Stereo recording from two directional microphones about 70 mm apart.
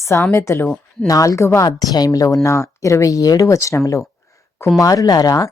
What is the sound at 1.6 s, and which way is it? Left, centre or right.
Speech, left.